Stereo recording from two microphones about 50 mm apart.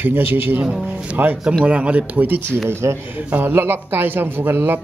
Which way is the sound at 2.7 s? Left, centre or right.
Right.